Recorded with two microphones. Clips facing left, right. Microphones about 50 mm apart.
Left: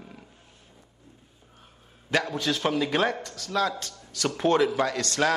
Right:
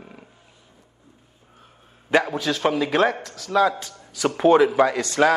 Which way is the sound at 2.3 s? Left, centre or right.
Centre.